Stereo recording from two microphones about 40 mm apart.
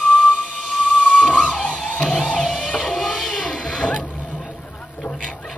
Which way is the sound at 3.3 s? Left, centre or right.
Centre.